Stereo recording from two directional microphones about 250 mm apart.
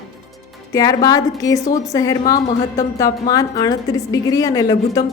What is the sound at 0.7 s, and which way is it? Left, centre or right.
A woman's voice, centre.